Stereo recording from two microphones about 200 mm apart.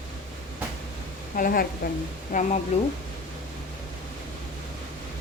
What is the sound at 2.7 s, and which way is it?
Speech, 30° left (ahead or behind).